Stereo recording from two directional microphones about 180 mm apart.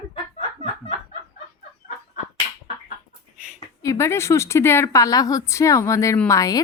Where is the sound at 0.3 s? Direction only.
30° left (ahead or behind).